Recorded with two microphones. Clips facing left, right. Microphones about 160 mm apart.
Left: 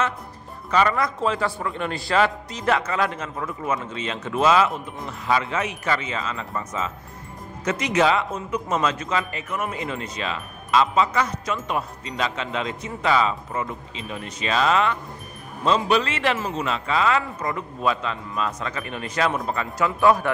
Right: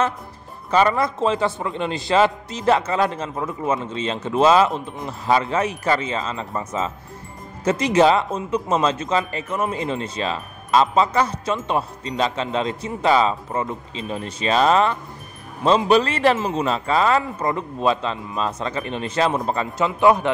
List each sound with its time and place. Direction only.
0.7 s a man's voice: 30° right (ahead or behind)